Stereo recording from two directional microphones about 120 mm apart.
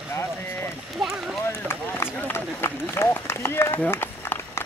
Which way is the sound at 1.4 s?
20° left (ahead or behind).